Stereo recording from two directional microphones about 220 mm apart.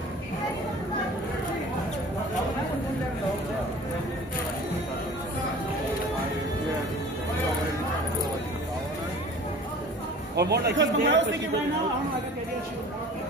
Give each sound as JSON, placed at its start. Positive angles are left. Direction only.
{"t": 10.3, "sound": "speech", "side_deg": -50}